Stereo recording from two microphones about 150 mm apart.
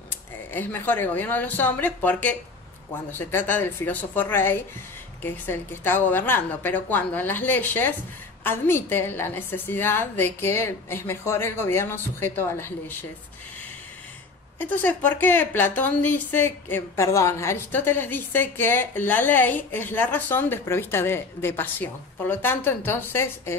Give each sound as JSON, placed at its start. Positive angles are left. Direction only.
{"t": 0.5, "sound": "a woman's voice", "side_deg": 15}
{"t": 14.6, "sound": "a woman's voice", "side_deg": 10}